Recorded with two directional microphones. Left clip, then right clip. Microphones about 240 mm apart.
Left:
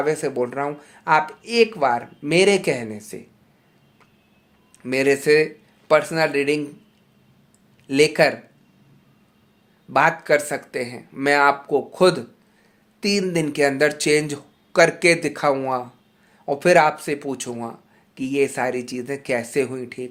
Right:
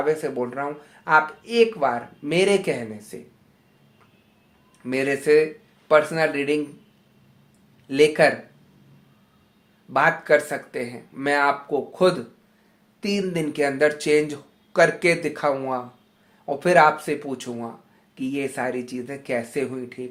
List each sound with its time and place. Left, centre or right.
0.0 s speech: left
4.8 s speech: left
7.9 s speech: left
9.9 s speech: left